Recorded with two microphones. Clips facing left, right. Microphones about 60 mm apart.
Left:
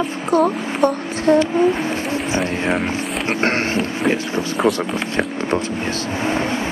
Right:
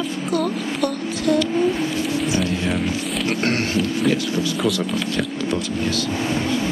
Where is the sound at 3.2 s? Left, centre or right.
Left.